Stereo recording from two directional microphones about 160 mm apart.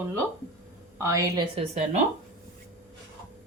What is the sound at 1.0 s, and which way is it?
Speech, 20° right (ahead or behind).